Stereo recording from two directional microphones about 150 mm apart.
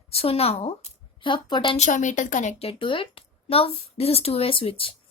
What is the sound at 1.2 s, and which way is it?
Speech, 30° left (ahead or behind).